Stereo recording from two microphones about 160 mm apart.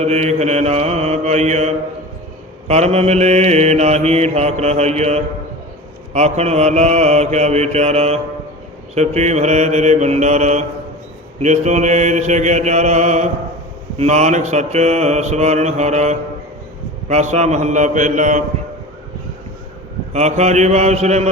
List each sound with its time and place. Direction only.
0.0 s mantra: 40° right (ahead or behind)
20.1 s mantra: 45° right (ahead or behind)